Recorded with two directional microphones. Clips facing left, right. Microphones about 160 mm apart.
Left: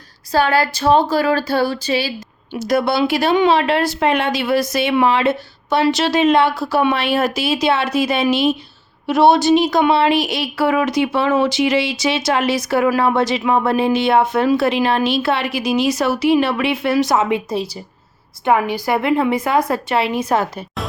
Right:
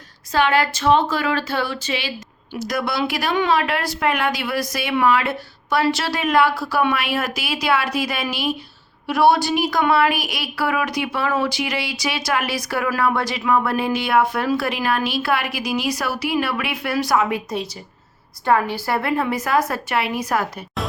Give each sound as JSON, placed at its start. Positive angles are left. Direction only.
{"t": 0.3, "sound": "a woman's voice", "side_deg": 35}
{"t": 18.4, "sound": "a woman's voice", "side_deg": 15}